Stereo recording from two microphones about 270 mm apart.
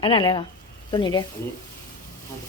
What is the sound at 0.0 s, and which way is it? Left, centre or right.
Speech, centre.